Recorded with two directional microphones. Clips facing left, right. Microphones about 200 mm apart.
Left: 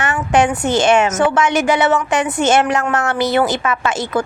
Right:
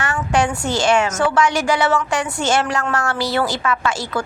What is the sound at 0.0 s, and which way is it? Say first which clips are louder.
A woman's voice: left 4 dB; 20° left (ahead or behind).